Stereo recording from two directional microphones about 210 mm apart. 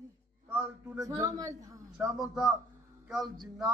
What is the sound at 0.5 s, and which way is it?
A man's voice, 5° right (ahead or behind).